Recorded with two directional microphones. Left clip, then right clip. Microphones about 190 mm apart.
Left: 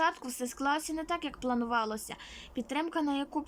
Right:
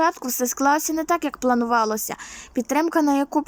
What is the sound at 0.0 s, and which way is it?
Speech, 25° right (ahead or behind).